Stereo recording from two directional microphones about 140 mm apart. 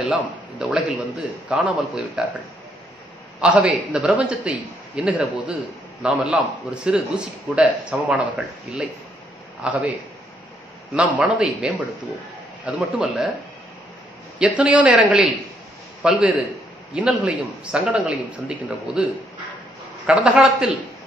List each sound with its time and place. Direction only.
0.1 s a man's voice: 5° right (ahead or behind)
11.0 s a man's voice: 5° right (ahead or behind)
14.6 s a man's voice: 10° right (ahead or behind)
20.1 s a man's voice: 5° right (ahead or behind)